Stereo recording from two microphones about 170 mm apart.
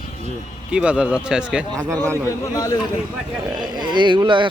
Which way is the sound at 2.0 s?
15° left (ahead or behind).